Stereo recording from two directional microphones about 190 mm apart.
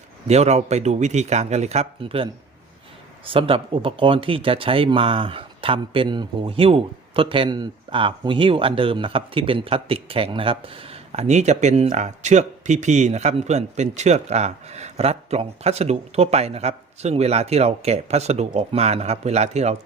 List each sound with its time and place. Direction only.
0.3 s speech: 35° right (ahead or behind)